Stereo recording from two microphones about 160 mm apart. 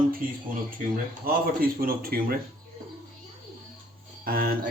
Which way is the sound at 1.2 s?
65° right (ahead or behind).